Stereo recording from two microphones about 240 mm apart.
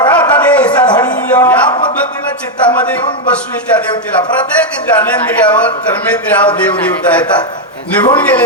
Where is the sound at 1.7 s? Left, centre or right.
Centre.